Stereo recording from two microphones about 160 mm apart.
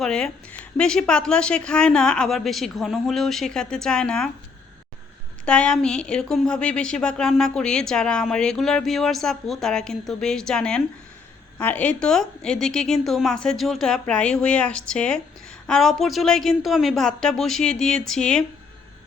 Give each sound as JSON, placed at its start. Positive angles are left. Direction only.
{"t": 0.0, "sound": "a woman's voice", "side_deg": 5}
{"t": 5.5, "sound": "a woman's voice", "side_deg": 5}